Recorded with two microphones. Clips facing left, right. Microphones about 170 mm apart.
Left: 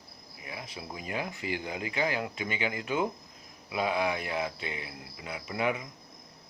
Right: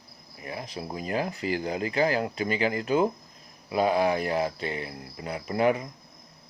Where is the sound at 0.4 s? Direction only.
40° right (ahead or behind).